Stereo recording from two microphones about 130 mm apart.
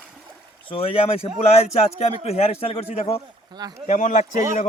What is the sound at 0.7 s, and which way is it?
A man's voice, 45° left (ahead or behind).